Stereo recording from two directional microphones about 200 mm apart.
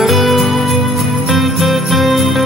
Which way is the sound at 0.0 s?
Centre (ahead or behind).